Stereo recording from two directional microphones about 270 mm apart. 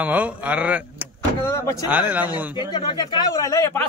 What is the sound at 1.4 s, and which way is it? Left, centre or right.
Speech, centre.